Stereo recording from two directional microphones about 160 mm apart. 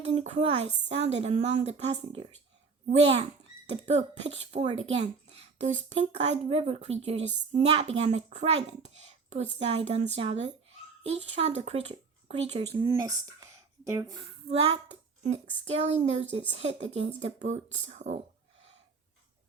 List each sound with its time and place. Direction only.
0.1 s a woman's voice: 45° right (ahead or behind)
2.9 s a woman's voice: 40° right (ahead or behind)
12.7 s speech: 25° right (ahead or behind)
14.5 s a child's voice: 40° right (ahead or behind)